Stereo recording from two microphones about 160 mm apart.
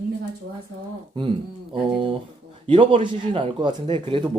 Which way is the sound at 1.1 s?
30° right (ahead or behind).